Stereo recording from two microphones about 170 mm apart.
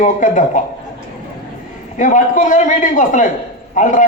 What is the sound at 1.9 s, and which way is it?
A man's voice, 50° left (ahead or behind).